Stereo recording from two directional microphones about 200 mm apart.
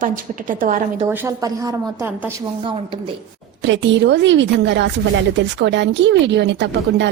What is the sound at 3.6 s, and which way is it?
Speech, 65° right (ahead or behind).